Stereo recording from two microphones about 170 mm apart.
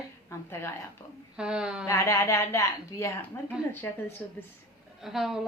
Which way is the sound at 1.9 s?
15° left (ahead or behind).